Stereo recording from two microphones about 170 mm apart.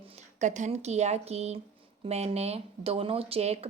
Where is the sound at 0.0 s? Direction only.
35° right (ahead or behind).